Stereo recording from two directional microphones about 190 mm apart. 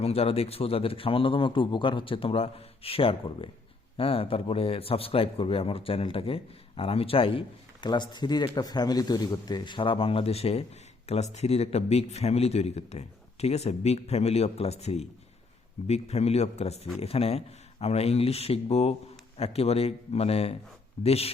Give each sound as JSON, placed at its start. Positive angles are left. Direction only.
{"t": 0.0, "sound": "a man's voice", "side_deg": 30}